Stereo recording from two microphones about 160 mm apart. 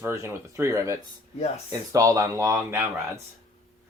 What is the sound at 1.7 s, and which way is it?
Speech, 20° right (ahead or behind).